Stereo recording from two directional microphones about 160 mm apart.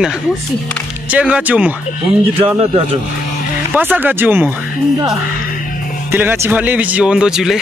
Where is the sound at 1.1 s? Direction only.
10° right (ahead or behind).